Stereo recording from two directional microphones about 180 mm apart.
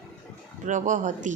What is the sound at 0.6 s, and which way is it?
Speech, 45° right (ahead or behind).